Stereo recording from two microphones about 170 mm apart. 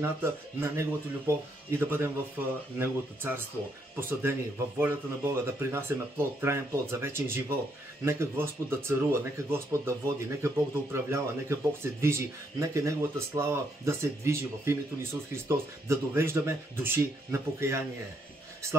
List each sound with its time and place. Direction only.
0.0 s speech: 15° right (ahead or behind)